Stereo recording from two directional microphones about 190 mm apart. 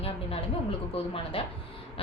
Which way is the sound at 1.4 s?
30° left (ahead or behind).